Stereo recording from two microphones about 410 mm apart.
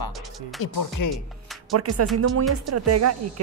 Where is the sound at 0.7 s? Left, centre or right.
Left.